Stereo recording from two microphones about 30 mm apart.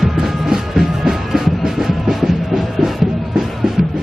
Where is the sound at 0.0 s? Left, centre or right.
Centre.